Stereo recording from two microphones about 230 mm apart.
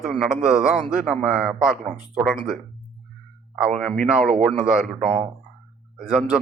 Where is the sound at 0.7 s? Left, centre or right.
Centre.